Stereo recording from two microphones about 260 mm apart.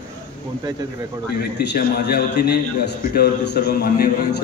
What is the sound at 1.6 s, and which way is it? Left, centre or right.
A man's voice, left.